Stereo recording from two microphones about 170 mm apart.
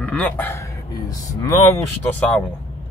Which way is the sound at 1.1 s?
20° left (ahead or behind).